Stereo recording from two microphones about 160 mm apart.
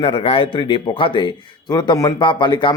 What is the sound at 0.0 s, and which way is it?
Speech, 30° left (ahead or behind).